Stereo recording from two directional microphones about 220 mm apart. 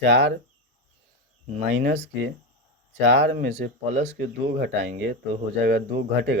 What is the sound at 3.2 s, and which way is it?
Speech, 50° right (ahead or behind).